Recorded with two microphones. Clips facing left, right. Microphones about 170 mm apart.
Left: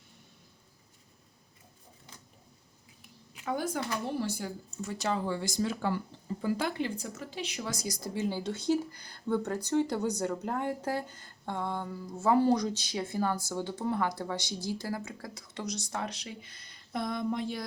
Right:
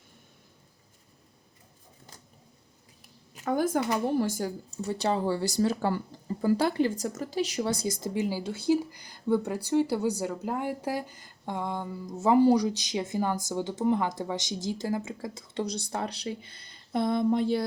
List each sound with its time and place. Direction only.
3.3 s speech: 45° right (ahead or behind); by 17.6 s 30° right (ahead or behind)